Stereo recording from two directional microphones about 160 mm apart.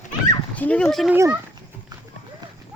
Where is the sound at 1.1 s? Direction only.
15° right (ahead or behind).